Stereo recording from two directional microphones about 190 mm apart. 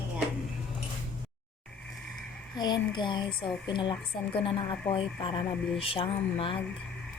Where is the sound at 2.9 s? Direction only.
25° left (ahead or behind).